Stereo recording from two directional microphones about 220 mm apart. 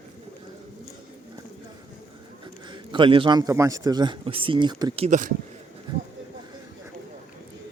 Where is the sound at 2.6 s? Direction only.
20° right (ahead or behind).